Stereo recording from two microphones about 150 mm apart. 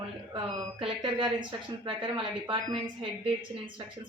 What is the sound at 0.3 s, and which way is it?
Speech, 35° right (ahead or behind).